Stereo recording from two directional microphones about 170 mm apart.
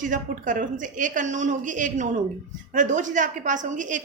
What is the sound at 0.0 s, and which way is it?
A woman's voice, 50° right (ahead or behind).